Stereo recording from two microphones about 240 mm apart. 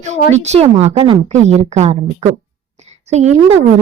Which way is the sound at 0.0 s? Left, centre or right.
Right.